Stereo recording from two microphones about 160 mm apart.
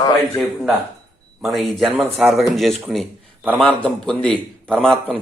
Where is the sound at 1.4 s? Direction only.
Centre (ahead or behind).